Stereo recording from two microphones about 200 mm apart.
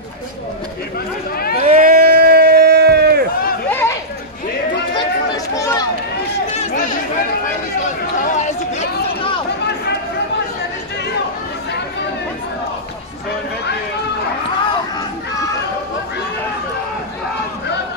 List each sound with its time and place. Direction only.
1.6 s run: 40° right (ahead or behind)
3.7 s chatter: 15° left (ahead or behind)
6.5 s chatter: 40° left (ahead or behind)
8.2 s chatter: 35° left (ahead or behind)